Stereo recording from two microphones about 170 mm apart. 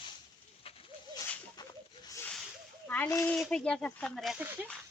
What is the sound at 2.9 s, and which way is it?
Speech, 15° left (ahead or behind).